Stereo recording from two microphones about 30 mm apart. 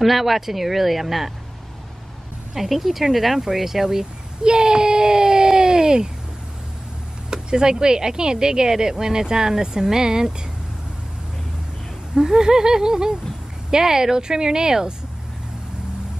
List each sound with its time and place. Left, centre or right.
0.0 s speech: centre
2.5 s speech: centre
4.0 s a sound: right
7.4 s a woman's voice: right
12.3 s a woman's voice: right